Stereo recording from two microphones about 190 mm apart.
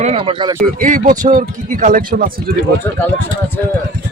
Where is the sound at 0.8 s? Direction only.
45° right (ahead or behind).